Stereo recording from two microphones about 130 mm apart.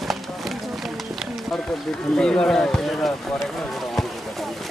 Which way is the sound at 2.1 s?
5° left (ahead or behind).